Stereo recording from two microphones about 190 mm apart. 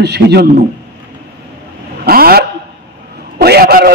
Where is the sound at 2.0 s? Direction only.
55° right (ahead or behind).